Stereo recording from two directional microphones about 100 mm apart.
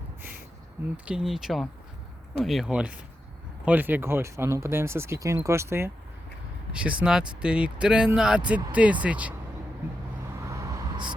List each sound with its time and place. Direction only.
1.0 s speech: 5° right (ahead or behind); by 5.9 s 25° right (ahead or behind)
6.7 s speech: 10° right (ahead or behind)
10.4 s vehicle: 30° right (ahead or behind)